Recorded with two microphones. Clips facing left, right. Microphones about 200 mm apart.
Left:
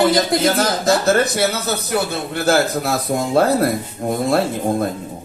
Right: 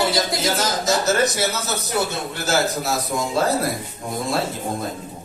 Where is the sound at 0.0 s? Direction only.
55° left (ahead or behind).